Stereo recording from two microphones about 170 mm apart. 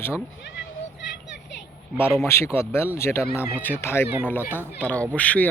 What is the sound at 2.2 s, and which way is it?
Speech, 15° left (ahead or behind).